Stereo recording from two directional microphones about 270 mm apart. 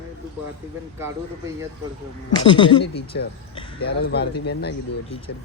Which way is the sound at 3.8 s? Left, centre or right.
Left.